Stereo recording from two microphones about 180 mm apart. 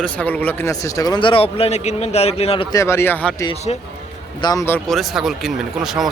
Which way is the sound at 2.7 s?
15° left (ahead or behind).